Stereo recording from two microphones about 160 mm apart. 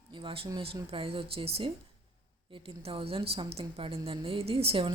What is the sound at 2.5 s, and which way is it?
A woman's voice, 35° right (ahead or behind).